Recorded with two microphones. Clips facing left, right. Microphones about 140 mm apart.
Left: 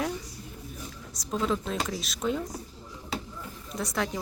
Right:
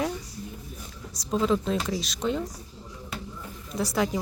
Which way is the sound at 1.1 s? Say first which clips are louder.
Right 4 dB; centre (ahead or behind).